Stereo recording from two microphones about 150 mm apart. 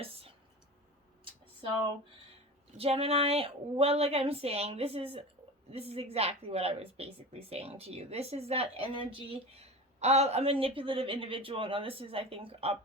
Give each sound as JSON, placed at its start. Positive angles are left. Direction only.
{"t": 2.7, "sound": "a woman's voice", "side_deg": -40}